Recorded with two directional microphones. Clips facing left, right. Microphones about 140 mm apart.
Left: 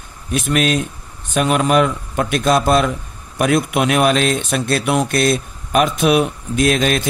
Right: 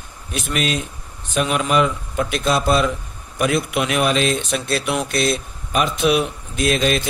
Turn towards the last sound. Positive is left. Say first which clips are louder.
# left 3 dB
turn(degrees=55)  # may be behind; listen again after turning